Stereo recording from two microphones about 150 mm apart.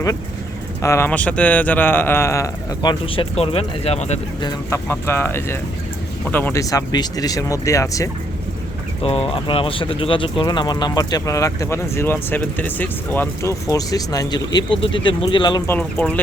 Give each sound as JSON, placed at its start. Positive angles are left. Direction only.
{"t": 0.8, "sound": "speech", "side_deg": 20}
{"t": 3.1, "sound": "speech", "side_deg": 40}
{"t": 4.7, "sound": "speech", "side_deg": 15}
{"t": 9.0, "sound": "speech", "side_deg": 40}
{"t": 15.6, "sound": "speech", "side_deg": 10}